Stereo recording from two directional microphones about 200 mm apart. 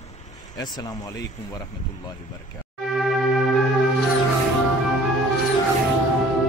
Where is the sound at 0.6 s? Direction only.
20° left (ahead or behind).